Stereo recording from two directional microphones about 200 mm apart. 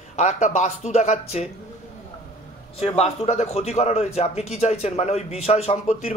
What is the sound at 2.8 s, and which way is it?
Speech, 30° left (ahead or behind).